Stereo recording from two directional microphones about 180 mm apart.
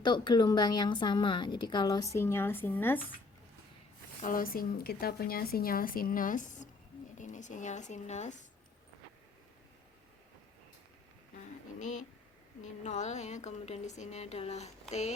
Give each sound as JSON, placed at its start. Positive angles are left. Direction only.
{"t": 0.0, "sound": "a woman's voice", "side_deg": 25}
{"t": 4.2, "sound": "a woman's voice", "side_deg": 50}
{"t": 11.8, "sound": "a woman's voice", "side_deg": 40}